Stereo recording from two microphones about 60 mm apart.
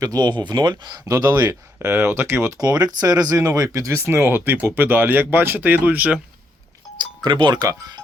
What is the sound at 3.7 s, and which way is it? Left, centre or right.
Speech, right.